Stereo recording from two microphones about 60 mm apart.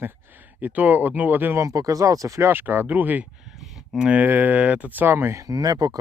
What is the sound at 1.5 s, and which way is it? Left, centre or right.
Speech, right.